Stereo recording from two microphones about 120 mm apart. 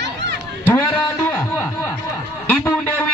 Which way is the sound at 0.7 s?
20° left (ahead or behind).